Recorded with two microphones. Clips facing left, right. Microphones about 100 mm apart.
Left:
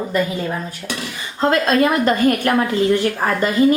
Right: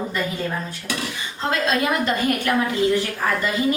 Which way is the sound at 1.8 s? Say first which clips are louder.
Left 6 dB; 45° left (ahead or behind).